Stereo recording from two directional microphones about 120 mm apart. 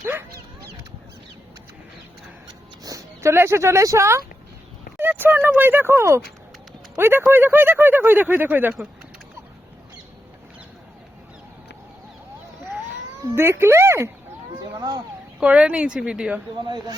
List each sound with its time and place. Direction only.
0.0 s dog: 20° right (ahead or behind)
2.8 s speech: 25° right (ahead or behind)
13.3 s speech: 20° right (ahead or behind)
14.7 s a sound: 35° right (ahead or behind)
15.4 s speech: 10° right (ahead or behind)
16.6 s speech: 35° right (ahead or behind)